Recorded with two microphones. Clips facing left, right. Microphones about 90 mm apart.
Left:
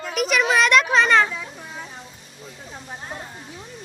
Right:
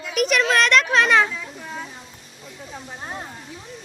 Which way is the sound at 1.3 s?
5° left (ahead or behind).